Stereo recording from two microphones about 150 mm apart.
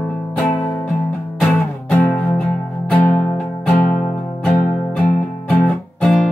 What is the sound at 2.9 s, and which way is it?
Music, 10° left (ahead or behind).